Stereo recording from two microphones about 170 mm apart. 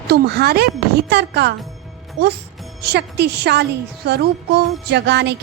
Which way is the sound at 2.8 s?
75° right (ahead or behind).